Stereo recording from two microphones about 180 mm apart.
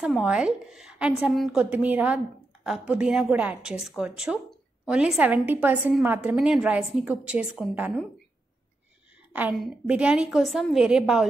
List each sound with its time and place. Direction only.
0.0 s a woman's voice: 5° right (ahead or behind)
9.3 s a woman's voice: 10° right (ahead or behind)